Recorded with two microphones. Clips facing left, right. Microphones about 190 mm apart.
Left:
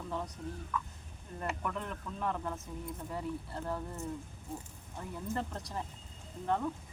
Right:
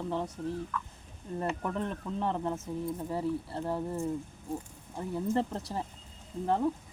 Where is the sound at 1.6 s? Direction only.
30° right (ahead or behind).